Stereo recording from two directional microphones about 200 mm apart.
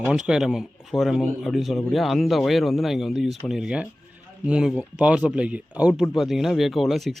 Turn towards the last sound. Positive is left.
turn(degrees=0)  # may be behind; listen again after turning